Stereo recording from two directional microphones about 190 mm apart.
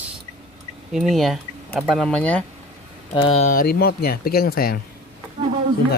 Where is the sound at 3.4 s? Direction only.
45° left (ahead or behind).